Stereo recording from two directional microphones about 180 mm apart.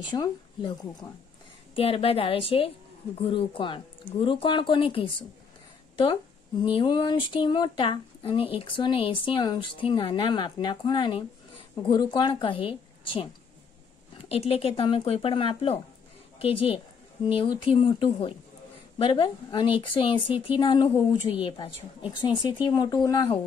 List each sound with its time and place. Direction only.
0.1 s a woman's voice: 25° left (ahead or behind)
1.8 s speech: 30° left (ahead or behind)
6.6 s speech: 25° left (ahead or behind)